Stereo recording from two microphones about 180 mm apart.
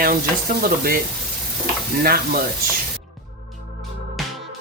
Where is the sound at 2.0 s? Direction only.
55° right (ahead or behind).